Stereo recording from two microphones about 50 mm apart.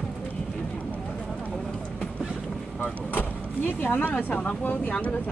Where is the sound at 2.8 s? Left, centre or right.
Left.